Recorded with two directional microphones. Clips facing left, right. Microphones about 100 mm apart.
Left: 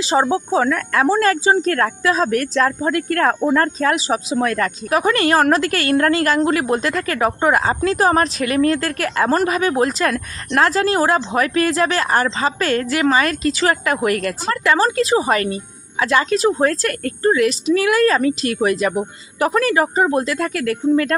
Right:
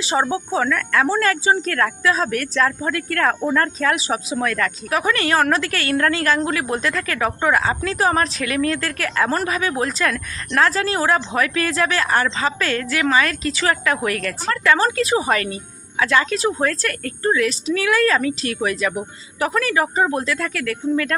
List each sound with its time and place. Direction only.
0.1 s a woman's voice: 20° left (ahead or behind)
0.6 s speech: 35° left (ahead or behind)
11.1 s a woman's voice: 30° left (ahead or behind)